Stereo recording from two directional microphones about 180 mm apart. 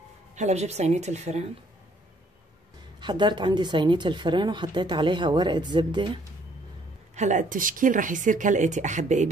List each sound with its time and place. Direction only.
0.4 s a woman's voice: 40° right (ahead or behind)
3.0 s a woman's voice: 25° right (ahead or behind)
7.2 s speech: 45° right (ahead or behind)